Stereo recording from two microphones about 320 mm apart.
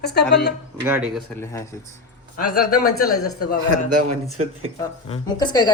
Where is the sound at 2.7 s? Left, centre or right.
Left.